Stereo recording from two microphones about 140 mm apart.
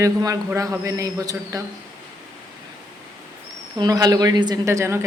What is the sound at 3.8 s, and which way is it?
A man's voice, 25° right (ahead or behind).